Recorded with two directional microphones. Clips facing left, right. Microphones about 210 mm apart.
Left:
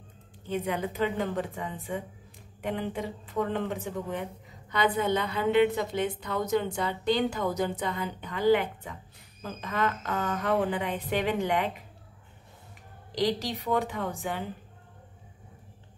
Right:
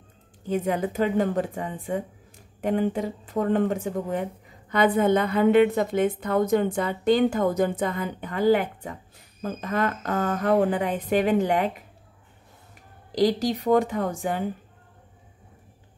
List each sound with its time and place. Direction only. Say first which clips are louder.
0.5 s speech: right 5 dB; 45° right (ahead or behind)
13.2 s speech: right 6 dB; 45° right (ahead or behind)